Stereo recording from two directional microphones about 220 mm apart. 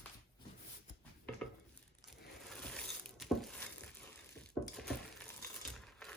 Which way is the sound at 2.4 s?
Centre (ahead or behind).